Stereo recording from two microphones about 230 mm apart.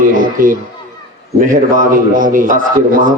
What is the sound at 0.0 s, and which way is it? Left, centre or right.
A man's voice, right.